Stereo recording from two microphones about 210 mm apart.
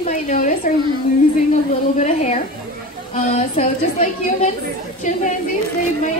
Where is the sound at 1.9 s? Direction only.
35° left (ahead or behind).